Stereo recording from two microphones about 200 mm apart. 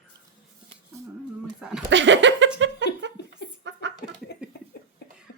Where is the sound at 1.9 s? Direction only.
65° right (ahead or behind).